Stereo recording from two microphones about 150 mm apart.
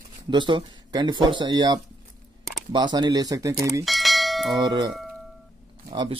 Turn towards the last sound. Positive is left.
turn(degrees=-35)  # may be behind; listen again after turning